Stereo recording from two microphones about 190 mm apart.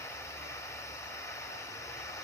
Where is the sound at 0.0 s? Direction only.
15° left (ahead or behind).